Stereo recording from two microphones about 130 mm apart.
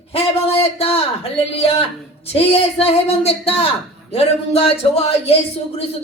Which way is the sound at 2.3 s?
50° left (ahead or behind).